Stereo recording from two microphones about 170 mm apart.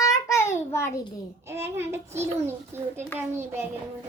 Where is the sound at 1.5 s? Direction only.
15° right (ahead or behind).